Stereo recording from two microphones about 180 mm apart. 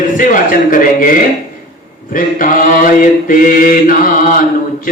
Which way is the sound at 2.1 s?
50° left (ahead or behind).